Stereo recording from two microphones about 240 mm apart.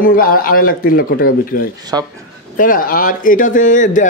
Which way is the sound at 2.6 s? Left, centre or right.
Left.